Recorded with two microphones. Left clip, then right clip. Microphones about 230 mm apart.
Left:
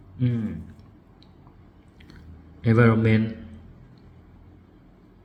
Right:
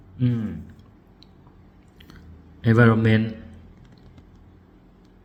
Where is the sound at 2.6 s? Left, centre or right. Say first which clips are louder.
Right 2 dB; centre.